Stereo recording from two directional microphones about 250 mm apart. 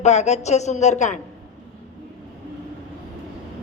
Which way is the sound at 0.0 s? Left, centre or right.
Left.